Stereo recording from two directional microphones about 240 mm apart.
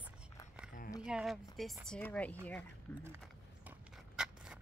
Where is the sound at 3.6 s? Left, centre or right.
Centre.